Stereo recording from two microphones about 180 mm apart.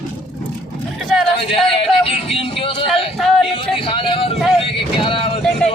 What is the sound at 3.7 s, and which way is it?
Vehicle, 30° left (ahead or behind).